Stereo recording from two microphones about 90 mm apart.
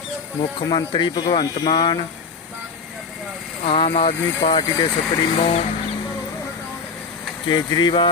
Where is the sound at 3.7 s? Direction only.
85° left; by 5.3 s 60° left (ahead or behind).